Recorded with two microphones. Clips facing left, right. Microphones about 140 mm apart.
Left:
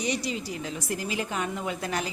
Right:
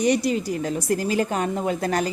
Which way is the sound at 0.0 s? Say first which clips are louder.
Right 9 dB; 50° right (ahead or behind).